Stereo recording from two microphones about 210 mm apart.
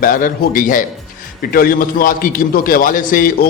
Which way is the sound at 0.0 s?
40° left (ahead or behind).